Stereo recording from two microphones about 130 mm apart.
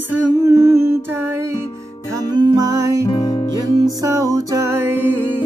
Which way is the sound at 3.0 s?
30° left (ahead or behind).